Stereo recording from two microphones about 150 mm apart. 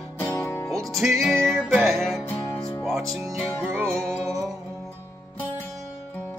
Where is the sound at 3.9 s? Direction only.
5° left (ahead or behind).